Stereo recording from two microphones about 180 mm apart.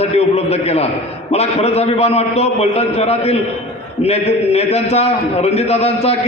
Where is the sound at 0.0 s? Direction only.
35° left (ahead or behind).